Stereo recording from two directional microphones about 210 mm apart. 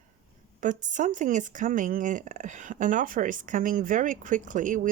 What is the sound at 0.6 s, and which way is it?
Speech, 35° right (ahead or behind).